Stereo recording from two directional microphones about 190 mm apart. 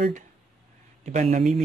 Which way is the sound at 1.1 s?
40° right (ahead or behind).